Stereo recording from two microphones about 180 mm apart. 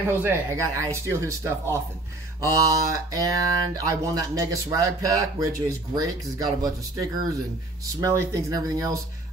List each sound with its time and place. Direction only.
0.1 s speech: 15° right (ahead or behind)